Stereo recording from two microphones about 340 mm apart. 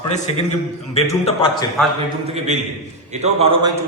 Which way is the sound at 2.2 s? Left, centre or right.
Centre.